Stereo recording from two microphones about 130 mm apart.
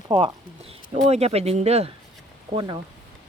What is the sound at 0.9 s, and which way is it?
Speech, 55° right (ahead or behind).